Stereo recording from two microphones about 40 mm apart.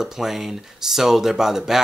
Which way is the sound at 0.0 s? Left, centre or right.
Centre.